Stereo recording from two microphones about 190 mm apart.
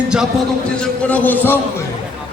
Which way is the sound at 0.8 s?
10° left (ahead or behind).